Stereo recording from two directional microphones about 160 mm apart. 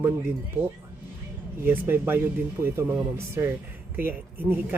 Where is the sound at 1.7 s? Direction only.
15° right (ahead or behind).